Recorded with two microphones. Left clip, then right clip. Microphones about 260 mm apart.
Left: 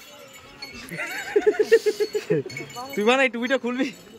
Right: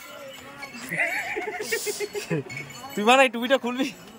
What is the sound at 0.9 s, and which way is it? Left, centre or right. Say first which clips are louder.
Speech: left 1 dB; centre.